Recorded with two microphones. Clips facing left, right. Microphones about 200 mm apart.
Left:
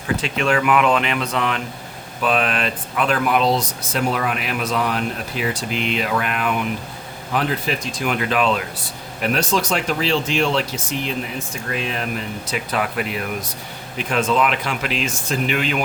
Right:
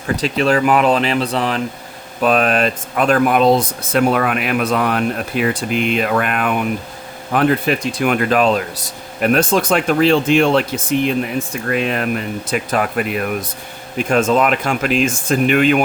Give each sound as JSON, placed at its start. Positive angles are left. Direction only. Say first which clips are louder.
{"t": 0.2, "sound": "speech", "louder": "right 7 dB", "side_deg": -35}
{"t": 2.2, "sound": "speech", "louder": "right 6 dB", "side_deg": -45}
{"t": 14.0, "sound": "speech", "louder": "right 5 dB", "side_deg": -45}